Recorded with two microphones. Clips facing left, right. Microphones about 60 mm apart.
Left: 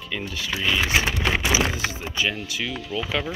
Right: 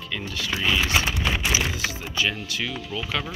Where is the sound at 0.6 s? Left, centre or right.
Left.